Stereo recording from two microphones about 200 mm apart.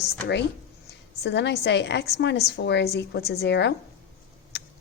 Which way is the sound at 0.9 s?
55° left (ahead or behind).